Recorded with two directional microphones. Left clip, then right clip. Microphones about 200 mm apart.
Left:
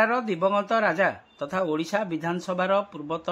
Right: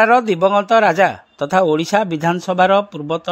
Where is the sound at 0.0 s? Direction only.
45° right (ahead or behind).